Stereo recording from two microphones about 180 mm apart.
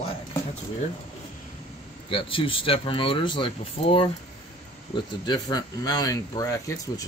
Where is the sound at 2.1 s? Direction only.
30° left (ahead or behind).